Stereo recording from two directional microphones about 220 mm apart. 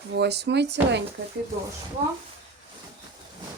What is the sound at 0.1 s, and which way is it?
Speech, 50° right (ahead or behind).